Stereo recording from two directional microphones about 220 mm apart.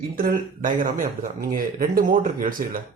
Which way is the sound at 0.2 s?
40° right (ahead or behind).